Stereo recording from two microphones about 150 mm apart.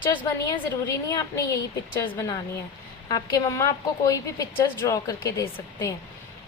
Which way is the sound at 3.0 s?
25° left (ahead or behind).